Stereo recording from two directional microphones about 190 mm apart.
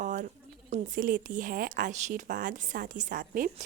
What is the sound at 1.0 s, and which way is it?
A woman's voice, 50° right (ahead or behind).